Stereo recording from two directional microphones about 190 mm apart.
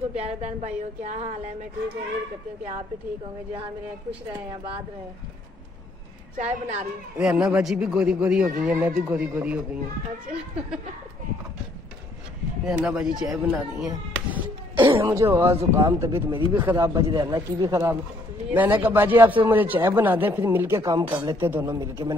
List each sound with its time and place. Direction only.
0.1 s a woman's voice: 35° right (ahead or behind)
6.3 s a woman's voice: 35° right (ahead or behind)
7.2 s speech: 5° right (ahead or behind)
12.6 s speech: 5° right (ahead or behind)
13.8 s cough: 10° right (ahead or behind)
14.9 s speech: 20° right (ahead or behind)
16.3 s speech: 25° right (ahead or behind)
16.6 s speech: 15° right (ahead or behind)